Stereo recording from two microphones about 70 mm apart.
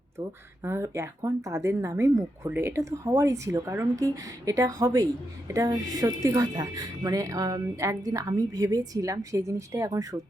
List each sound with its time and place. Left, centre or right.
0.2 s speech: right
2.4 s speech: right
7.8 s speech: right